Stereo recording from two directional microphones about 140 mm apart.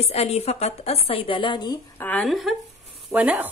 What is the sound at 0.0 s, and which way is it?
A woman's voice, 50° left (ahead or behind).